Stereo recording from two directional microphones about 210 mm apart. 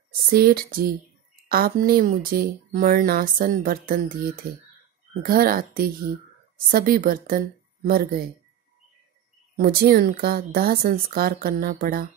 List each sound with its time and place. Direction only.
0.3 s speech: 45° right (ahead or behind)
9.6 s speech: 45° right (ahead or behind)